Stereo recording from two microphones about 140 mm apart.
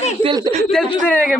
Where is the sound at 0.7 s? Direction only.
5° left (ahead or behind).